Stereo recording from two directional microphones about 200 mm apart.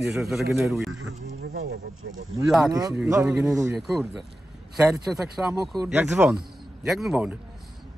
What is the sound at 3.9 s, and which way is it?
Speech, centre (ahead or behind).